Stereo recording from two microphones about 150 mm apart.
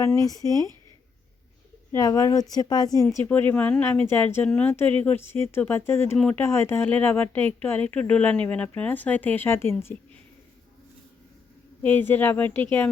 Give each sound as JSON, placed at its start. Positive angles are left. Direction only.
{"t": 0.3, "sound": "speech", "side_deg": 25}
{"t": 1.9, "sound": "speech", "side_deg": 20}
{"t": 3.2, "sound": "speech", "side_deg": 10}
{"t": 11.8, "sound": "speech", "side_deg": 15}